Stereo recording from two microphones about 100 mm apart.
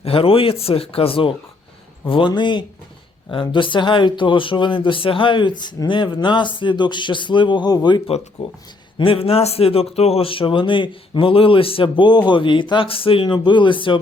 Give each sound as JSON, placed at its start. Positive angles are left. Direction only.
{"t": 0.0, "sound": "speech", "side_deg": 70}
{"t": 8.4, "sound": "speech", "side_deg": 90}
{"t": 9.0, "sound": "a man's voice", "side_deg": 65}